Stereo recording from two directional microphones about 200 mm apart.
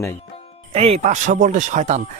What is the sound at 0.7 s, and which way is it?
Speech, 30° right (ahead or behind).